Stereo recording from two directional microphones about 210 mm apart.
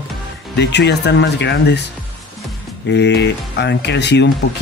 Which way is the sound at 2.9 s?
55° left (ahead or behind).